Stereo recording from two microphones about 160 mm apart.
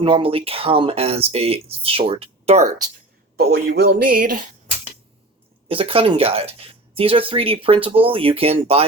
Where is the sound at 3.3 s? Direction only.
75° right (ahead or behind).